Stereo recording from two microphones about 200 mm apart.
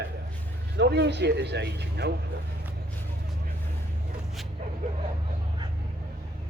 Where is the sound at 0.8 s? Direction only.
60° right (ahead or behind).